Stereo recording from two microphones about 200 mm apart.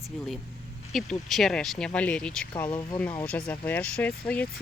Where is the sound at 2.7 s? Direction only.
25° left (ahead or behind).